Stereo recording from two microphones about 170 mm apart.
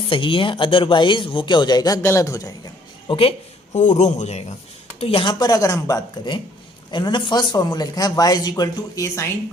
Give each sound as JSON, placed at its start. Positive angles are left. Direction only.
{"t": 0.1, "sound": "speech", "side_deg": 30}
{"t": 3.1, "sound": "speech", "side_deg": 35}
{"t": 3.8, "sound": "speech", "side_deg": 45}